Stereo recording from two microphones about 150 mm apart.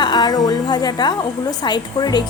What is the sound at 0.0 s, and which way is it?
A woman's voice, 30° left (ahead or behind).